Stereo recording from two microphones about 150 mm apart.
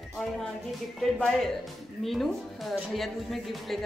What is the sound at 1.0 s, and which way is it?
A woman's voice, centre (ahead or behind).